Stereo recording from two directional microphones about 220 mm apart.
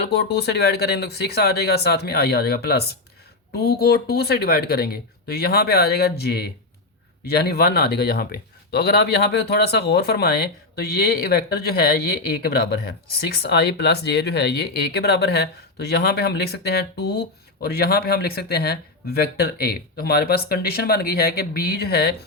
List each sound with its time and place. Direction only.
0.0 s speech: 45° left (ahead or behind)